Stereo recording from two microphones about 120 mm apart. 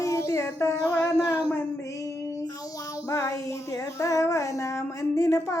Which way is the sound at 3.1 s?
25° left (ahead or behind).